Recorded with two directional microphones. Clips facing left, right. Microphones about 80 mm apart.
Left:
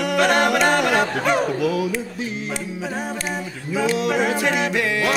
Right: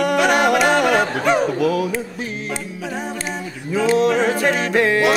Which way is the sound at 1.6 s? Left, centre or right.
Right.